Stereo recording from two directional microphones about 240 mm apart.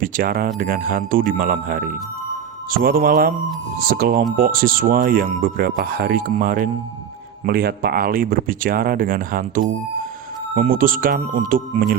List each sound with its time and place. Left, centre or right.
0.0 s speech: right